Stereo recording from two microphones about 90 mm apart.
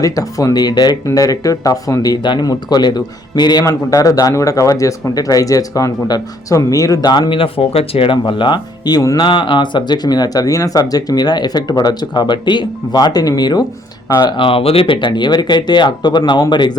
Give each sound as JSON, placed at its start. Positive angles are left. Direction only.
{"t": 0.0, "sound": "speech", "side_deg": 40}
{"t": 8.3, "sound": "speech", "side_deg": 60}
{"t": 9.2, "sound": "speech", "side_deg": 70}
{"t": 14.3, "sound": "speech", "side_deg": 80}